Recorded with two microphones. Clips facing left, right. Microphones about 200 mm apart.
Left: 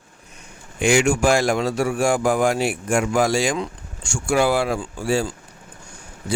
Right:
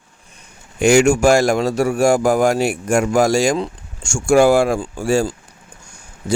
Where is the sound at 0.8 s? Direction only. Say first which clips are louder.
Right 5 dB; 45° right (ahead or behind).